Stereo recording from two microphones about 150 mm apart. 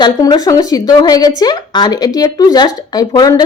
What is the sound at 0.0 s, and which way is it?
A woman's voice, 25° left (ahead or behind).